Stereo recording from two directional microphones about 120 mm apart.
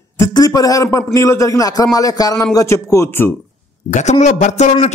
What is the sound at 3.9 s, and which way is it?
Speech, 90° left.